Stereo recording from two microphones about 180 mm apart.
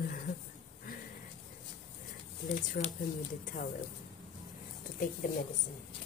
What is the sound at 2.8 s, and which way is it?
Speech, 50° left (ahead or behind).